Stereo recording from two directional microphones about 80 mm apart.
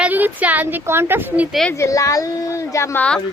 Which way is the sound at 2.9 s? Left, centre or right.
Centre.